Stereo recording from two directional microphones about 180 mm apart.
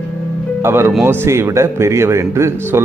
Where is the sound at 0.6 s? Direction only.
15° right (ahead or behind).